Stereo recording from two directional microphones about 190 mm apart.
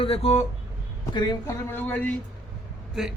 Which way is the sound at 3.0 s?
5° right (ahead or behind).